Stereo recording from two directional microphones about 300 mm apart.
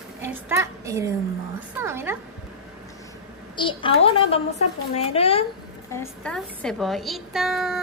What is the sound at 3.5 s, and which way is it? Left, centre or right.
A woman's voice, centre.